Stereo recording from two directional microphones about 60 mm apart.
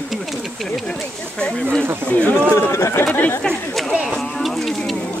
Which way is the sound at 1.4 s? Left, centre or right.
Centre.